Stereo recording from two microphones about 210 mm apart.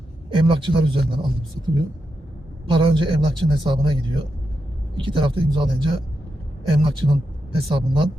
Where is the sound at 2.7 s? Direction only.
25° right (ahead or behind).